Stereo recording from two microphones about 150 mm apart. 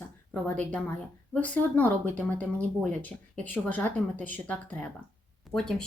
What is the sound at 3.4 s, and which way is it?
Speech, 10° left (ahead or behind).